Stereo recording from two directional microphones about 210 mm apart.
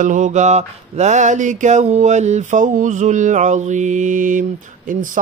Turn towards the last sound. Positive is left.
turn(degrees=-40)  # may be behind; listen again after turning